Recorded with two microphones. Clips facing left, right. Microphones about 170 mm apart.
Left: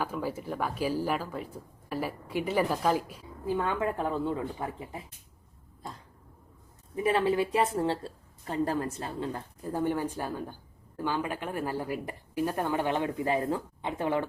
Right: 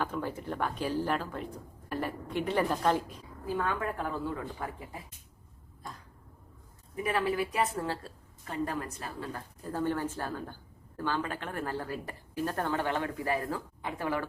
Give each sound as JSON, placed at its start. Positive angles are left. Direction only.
{"t": 0.0, "sound": "a woman's voice", "side_deg": 5}
{"t": 3.4, "sound": "a woman's voice", "side_deg": 20}
{"t": 6.9, "sound": "a woman's voice", "side_deg": 25}